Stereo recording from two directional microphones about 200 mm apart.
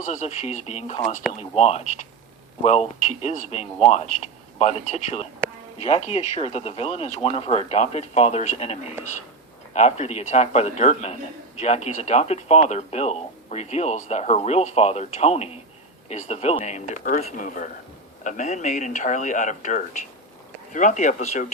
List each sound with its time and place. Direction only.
0.0 s a man's voice: 35° left (ahead or behind)